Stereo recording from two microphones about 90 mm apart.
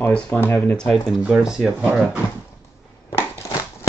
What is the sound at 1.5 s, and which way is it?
Speech, centre (ahead or behind).